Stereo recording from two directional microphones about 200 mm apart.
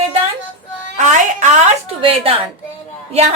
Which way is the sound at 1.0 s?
35° right (ahead or behind).